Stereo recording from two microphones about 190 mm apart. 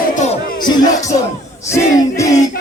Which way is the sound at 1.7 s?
15° left (ahead or behind).